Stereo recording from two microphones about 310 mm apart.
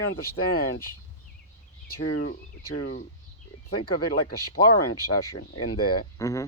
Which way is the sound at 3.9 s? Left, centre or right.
Left.